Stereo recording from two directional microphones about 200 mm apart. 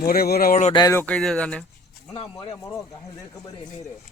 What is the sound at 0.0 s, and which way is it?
Speech, 50° left (ahead or behind).